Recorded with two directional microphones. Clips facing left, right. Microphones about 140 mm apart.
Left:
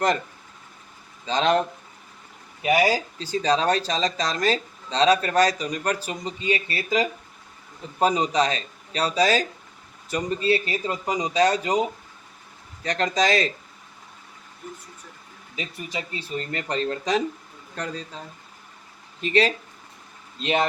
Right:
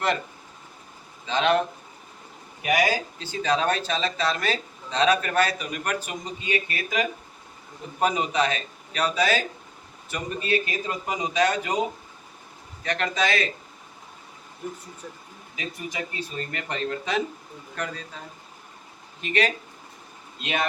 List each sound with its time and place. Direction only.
1.3 s speech: 35° left (ahead or behind)
12.8 s speech: 35° left (ahead or behind)
15.5 s speech: 25° left (ahead or behind)
19.2 s speech: 30° left (ahead or behind)